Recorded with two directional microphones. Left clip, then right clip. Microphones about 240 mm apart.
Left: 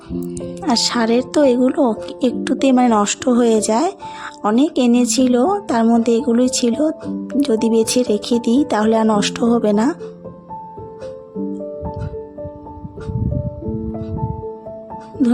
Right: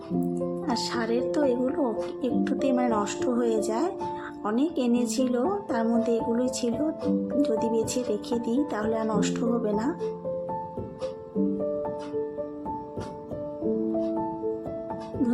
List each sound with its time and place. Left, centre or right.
0.6 s a woman's voice: left